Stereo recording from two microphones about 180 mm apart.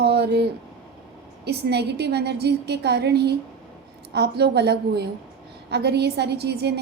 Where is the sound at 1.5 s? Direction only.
65° right (ahead or behind).